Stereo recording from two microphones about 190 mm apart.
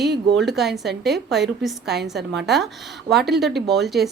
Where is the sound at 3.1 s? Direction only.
Centre (ahead or behind).